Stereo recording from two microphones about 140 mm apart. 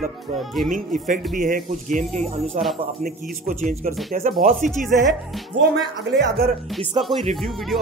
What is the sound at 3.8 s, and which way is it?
Speech, 80° right.